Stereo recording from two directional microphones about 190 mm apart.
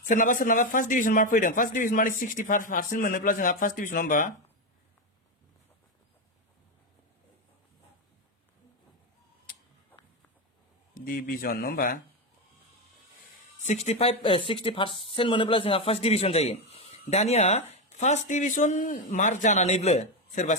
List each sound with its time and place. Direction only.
0.1 s a man's voice: 45° left (ahead or behind)
11.0 s a man's voice: 50° left (ahead or behind)
13.7 s a man's voice: 35° left (ahead or behind)